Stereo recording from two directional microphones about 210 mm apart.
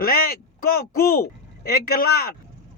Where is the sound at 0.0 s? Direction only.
45° left (ahead or behind).